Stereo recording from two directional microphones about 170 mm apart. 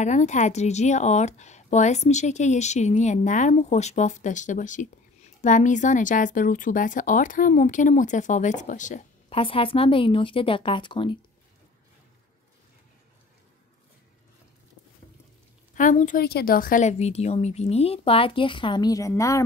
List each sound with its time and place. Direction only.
0.0 s speech: 45° left (ahead or behind)
9.3 s a woman's voice: 30° left (ahead or behind)
15.7 s speech: 50° left (ahead or behind)
16.3 s a woman's voice: 65° left (ahead or behind); by 19.4 s 20° left (ahead or behind)